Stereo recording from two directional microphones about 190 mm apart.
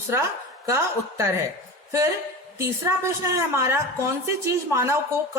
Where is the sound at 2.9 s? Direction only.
15° right (ahead or behind).